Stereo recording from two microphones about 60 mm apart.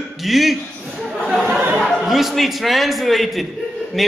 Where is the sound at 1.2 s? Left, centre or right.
Right.